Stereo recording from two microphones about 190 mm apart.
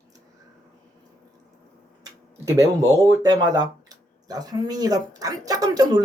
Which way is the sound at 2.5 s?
15° right (ahead or behind).